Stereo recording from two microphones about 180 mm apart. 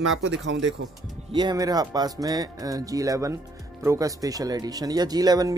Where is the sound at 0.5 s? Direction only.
80° right.